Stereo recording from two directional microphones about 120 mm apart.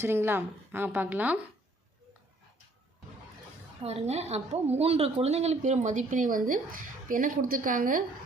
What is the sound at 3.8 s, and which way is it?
A woman's voice, 60° right (ahead or behind).